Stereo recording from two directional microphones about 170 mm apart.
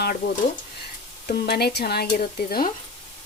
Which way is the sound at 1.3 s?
70° left (ahead or behind).